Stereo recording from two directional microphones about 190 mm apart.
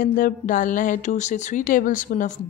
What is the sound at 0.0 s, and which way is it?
Speech, 45° left (ahead or behind).